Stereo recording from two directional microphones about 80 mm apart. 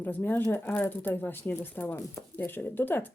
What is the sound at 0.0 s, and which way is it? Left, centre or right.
Speech, left.